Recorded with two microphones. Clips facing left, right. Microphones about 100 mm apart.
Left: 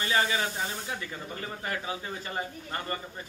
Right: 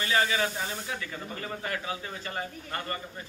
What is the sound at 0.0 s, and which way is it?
Speech, 25° left (ahead or behind).